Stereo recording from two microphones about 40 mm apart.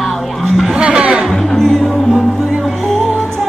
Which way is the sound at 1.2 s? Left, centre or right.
Centre.